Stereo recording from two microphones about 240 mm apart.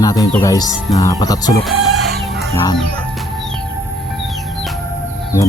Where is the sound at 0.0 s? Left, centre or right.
Centre.